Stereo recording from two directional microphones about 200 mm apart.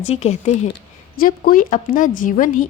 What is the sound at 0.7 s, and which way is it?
A woman's voice, 50° left (ahead or behind).